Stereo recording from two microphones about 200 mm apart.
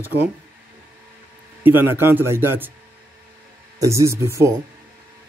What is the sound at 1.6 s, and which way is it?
A man's voice, 10° right (ahead or behind).